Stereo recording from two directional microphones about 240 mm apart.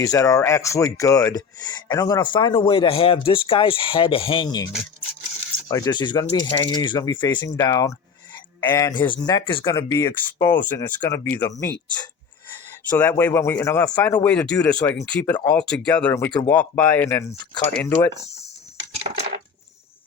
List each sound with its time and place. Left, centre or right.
0.0 s speech: centre